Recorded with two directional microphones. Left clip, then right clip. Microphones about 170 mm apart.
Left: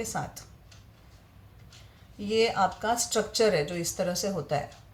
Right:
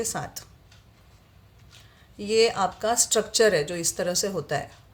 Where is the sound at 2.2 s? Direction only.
60° right (ahead or behind).